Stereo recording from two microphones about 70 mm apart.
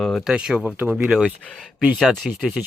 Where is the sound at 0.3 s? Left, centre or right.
Centre.